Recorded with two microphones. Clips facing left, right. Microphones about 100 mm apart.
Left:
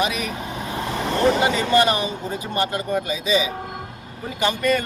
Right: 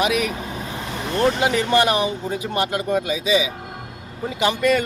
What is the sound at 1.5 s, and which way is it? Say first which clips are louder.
Speech: even; 70° right (ahead or behind).